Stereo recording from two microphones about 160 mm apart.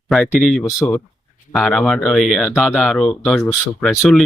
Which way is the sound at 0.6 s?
15° left (ahead or behind).